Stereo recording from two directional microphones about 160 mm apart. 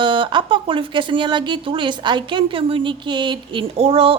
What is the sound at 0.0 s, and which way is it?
A woman's voice, 30° right (ahead or behind).